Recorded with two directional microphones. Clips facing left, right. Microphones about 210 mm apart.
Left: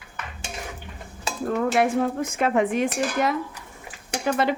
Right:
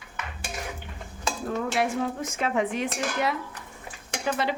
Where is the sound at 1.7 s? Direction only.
55° left (ahead or behind).